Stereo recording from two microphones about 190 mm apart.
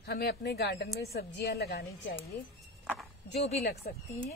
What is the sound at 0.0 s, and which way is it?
Speech, 55° left (ahead or behind).